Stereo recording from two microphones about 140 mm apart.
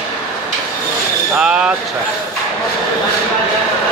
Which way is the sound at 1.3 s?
5° right (ahead or behind).